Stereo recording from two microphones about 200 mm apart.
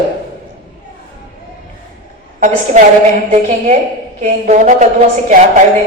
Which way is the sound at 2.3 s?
40° right (ahead or behind).